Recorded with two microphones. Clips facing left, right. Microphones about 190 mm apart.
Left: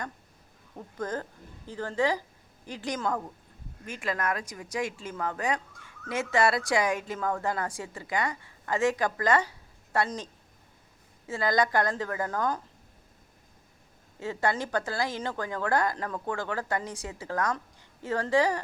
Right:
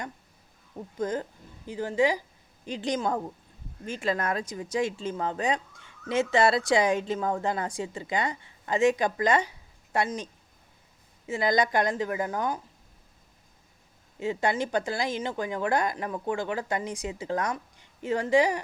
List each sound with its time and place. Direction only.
0.9 s speech: 15° right (ahead or behind)
11.3 s speech: 15° right (ahead or behind)
14.2 s speech: 15° right (ahead or behind)